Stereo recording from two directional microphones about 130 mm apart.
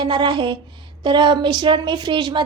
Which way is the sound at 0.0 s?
40° right (ahead or behind).